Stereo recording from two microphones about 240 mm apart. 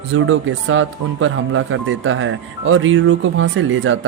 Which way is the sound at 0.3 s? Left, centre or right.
Right.